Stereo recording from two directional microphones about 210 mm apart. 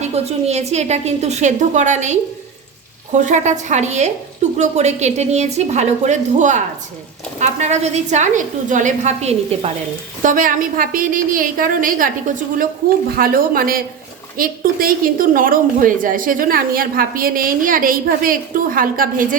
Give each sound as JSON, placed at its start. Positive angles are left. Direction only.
{"t": 0.0, "sound": "a woman's voice", "side_deg": -30}